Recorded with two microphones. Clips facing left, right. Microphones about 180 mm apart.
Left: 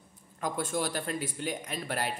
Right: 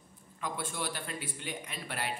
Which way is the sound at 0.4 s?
45° left (ahead or behind).